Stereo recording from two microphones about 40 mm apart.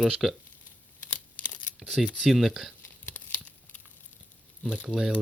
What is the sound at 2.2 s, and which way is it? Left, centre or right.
Speech, centre.